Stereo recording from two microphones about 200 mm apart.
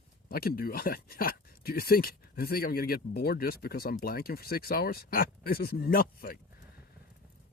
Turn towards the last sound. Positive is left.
turn(degrees=45)  # may be behind; listen again after turning